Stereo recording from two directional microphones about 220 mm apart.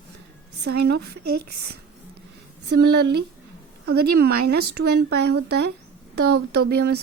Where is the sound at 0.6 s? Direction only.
50° right (ahead or behind).